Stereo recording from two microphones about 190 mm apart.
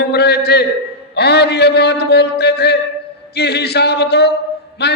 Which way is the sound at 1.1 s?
60° left (ahead or behind).